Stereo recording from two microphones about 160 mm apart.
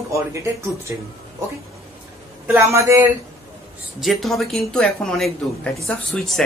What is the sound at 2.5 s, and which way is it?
Speech, 15° right (ahead or behind).